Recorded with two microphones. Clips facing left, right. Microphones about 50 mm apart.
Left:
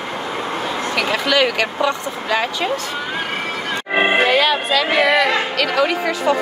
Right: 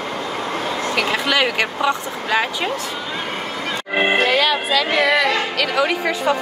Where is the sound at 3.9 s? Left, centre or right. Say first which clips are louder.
Left 2 dB; centre.